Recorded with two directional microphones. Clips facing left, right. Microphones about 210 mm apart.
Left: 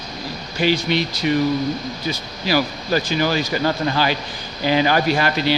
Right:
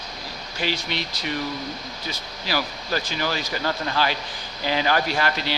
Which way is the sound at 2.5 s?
10° left (ahead or behind).